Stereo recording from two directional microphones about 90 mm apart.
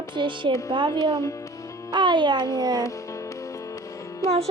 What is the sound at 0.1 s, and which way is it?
Music, 60° right (ahead or behind).